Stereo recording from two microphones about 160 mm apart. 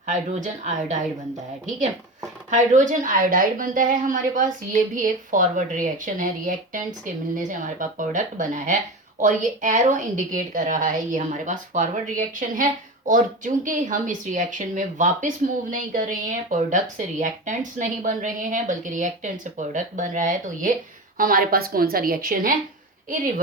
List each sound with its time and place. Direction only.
0.1 s a woman's voice: 50° right (ahead or behind)
2.5 s a woman's voice: 50° right (ahead or behind)